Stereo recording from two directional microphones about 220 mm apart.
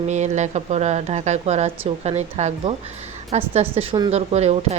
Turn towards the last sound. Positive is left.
turn(degrees=-30)  # may be behind; listen again after turning